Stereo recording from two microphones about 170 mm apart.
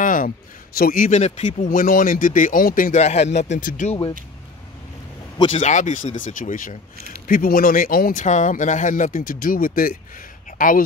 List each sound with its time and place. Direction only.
0.0 s a sound: 50° left (ahead or behind)
0.7 s speech: 55° left (ahead or behind)
5.6 s speech: 45° left (ahead or behind)